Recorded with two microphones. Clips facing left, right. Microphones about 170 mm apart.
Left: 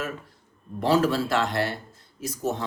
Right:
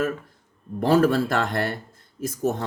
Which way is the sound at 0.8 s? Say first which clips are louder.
Right 3 dB; 50° right (ahead or behind).